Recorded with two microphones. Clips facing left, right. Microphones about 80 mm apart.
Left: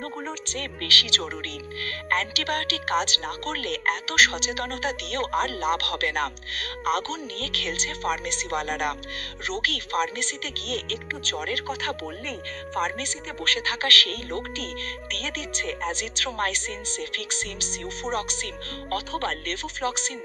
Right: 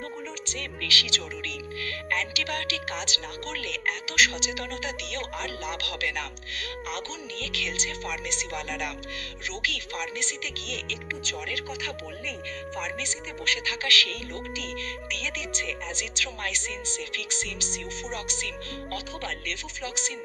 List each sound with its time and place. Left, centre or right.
0.9 s speech: left